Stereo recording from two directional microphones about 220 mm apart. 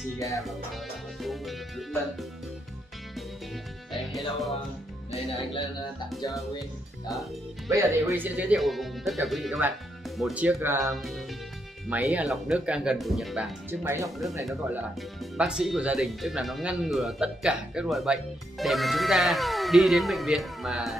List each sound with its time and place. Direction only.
1.2 s music: centre (ahead or behind)
3.9 s music: centre (ahead or behind)
6.2 s speech: 15° left (ahead or behind)
7.1 s speech: centre (ahead or behind)